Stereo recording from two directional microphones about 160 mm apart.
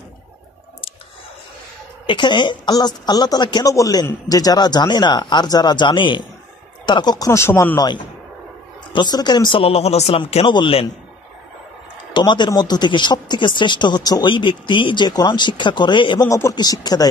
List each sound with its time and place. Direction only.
2.0 s speech: 30° left (ahead or behind)
12.1 s speech: 30° left (ahead or behind)